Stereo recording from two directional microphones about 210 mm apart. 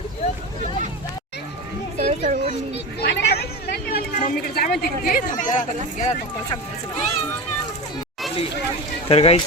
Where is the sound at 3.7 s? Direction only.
45° left (ahead or behind).